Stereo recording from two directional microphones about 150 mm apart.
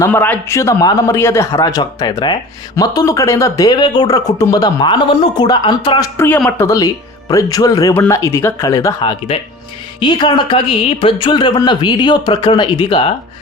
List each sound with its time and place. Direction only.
0.0 s speech: 10° left (ahead or behind); by 6.1 s 30° left (ahead or behind)
6.1 s a woman's voice: 10° left (ahead or behind); by 13.1 s 35° left (ahead or behind)